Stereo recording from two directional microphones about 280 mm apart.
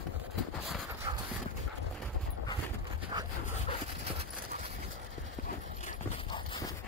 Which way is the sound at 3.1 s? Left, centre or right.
Centre.